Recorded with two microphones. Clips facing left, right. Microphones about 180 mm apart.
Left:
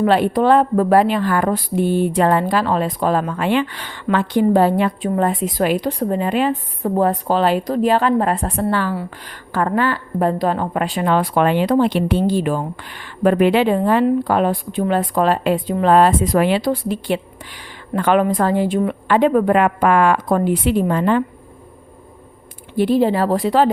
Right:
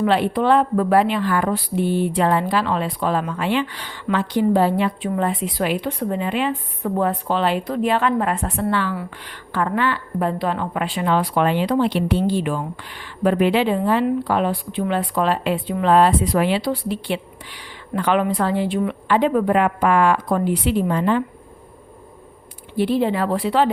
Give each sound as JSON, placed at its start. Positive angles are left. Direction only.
{"t": 0.0, "sound": "a woman's voice", "side_deg": 45}
{"t": 22.8, "sound": "speech", "side_deg": 40}